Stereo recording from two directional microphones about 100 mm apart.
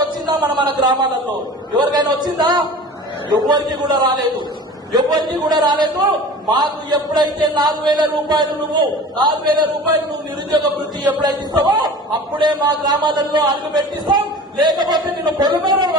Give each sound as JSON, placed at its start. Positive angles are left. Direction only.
{"t": 0.3, "sound": "a man's voice", "side_deg": -45}
{"t": 11.2, "sound": "a man's voice", "side_deg": -45}